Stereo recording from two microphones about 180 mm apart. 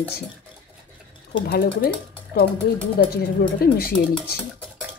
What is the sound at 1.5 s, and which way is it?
Speech, 70° left (ahead or behind).